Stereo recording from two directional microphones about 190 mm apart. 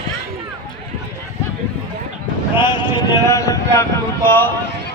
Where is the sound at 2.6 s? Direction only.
25° left (ahead or behind).